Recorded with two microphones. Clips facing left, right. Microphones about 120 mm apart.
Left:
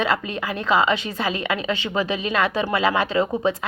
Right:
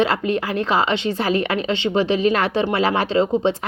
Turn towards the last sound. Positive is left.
turn(degrees=-30)  # may be behind; listen again after turning